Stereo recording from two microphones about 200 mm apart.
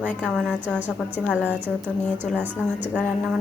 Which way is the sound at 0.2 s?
5° left (ahead or behind).